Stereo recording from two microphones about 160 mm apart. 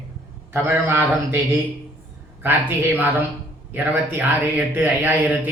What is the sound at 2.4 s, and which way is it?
A man's voice, 10° right (ahead or behind).